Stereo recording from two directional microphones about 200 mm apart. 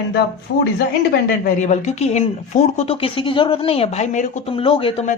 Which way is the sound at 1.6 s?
35° left (ahead or behind).